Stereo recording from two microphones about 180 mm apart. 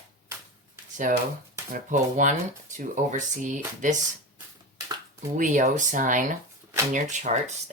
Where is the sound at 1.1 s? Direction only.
45° right (ahead or behind).